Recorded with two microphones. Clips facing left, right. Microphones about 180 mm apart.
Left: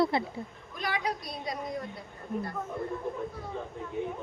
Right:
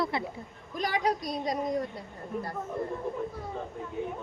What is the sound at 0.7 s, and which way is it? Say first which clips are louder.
Speech: right 4 dB; 40° right (ahead or behind).